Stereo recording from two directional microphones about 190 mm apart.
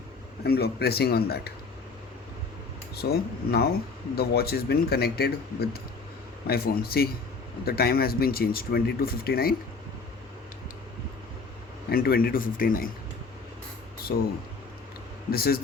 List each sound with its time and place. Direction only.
0.4 s speech: 55° left (ahead or behind)
2.9 s speech: 55° left (ahead or behind)
11.9 s speech: 55° left (ahead or behind)
14.1 s speech: 65° left (ahead or behind)
15.3 s speech: 55° left (ahead or behind)